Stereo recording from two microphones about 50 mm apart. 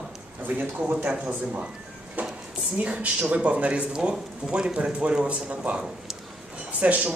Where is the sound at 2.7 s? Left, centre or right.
Right.